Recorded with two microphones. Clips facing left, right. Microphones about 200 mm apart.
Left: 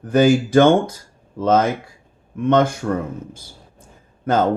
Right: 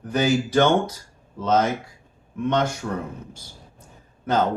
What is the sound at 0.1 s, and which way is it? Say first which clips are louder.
Speech: left 7 dB; 50° left (ahead or behind).